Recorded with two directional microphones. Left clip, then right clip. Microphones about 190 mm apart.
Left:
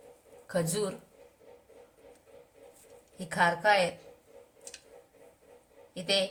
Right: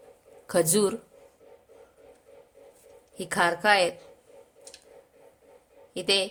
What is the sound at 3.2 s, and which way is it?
Speech, 60° right (ahead or behind).